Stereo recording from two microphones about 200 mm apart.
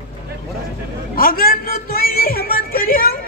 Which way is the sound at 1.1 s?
45° left (ahead or behind).